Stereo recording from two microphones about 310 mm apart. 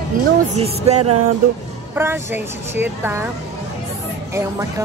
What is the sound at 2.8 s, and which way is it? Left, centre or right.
Speech, centre.